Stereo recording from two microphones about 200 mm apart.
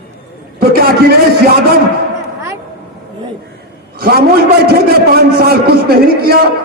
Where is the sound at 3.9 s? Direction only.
50° right (ahead or behind).